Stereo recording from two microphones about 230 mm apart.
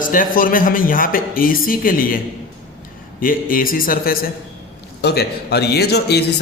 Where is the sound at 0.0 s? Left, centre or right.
Left.